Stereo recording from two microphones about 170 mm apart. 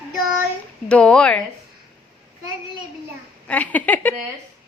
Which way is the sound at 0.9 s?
5° left (ahead or behind).